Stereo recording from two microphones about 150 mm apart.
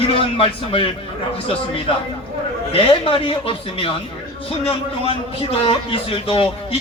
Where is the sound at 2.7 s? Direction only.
35° left (ahead or behind).